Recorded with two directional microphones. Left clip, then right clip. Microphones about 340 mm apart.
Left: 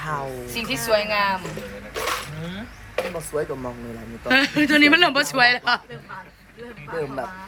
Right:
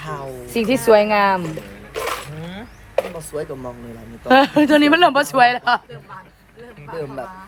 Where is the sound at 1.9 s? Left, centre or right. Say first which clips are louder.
Right 2 dB; right.